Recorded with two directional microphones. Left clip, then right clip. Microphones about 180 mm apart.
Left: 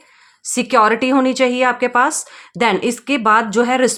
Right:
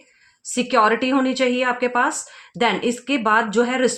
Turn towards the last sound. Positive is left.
turn(degrees=45)  # may be behind; listen again after turning